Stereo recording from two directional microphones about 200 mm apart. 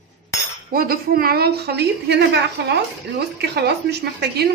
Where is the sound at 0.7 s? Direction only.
45° right (ahead or behind).